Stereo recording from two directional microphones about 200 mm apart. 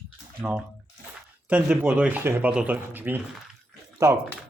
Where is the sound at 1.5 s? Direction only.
10° right (ahead or behind).